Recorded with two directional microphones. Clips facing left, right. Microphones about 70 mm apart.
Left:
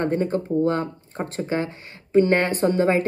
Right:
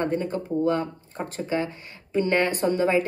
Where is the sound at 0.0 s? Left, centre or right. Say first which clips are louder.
Left 3 dB; left.